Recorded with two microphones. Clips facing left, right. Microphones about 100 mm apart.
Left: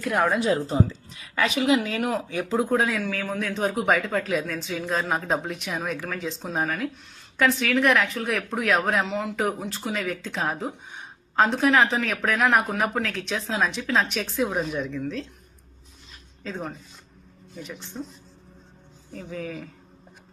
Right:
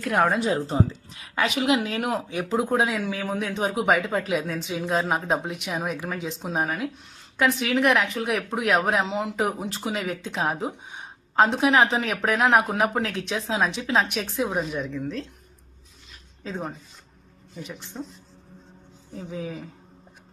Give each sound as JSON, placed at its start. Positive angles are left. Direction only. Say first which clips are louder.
{"t": 0.4, "sound": "speech", "louder": "left 1 dB", "side_deg": -25}
{"t": 7.6, "sound": "speech", "louder": "right 1 dB", "side_deg": -20}
{"t": 14.2, "sound": "a woman's voice", "louder": "even", "side_deg": -5}
{"t": 14.8, "sound": "speech", "louder": "even", "side_deg": -15}
{"t": 16.4, "sound": "speech", "louder": "right 1 dB", "side_deg": -20}
{"t": 19.1, "sound": "speech", "louder": "even", "side_deg": -20}